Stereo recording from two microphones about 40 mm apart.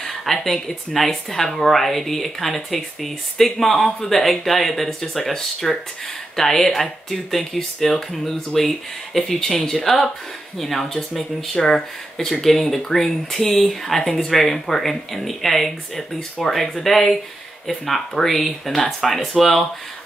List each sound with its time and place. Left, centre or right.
0.0 s speech: centre
16.2 s speech: centre